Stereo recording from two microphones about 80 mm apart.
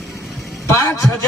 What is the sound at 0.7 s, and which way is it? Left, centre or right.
Speech, left.